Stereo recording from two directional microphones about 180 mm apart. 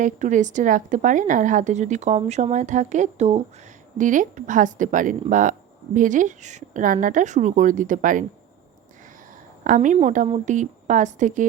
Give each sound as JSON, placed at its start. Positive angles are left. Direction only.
{"t": 0.0, "sound": "speech", "side_deg": -45}
{"t": 9.6, "sound": "speech", "side_deg": -45}